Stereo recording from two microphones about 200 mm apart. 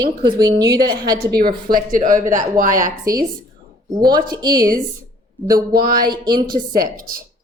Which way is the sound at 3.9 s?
20° right (ahead or behind).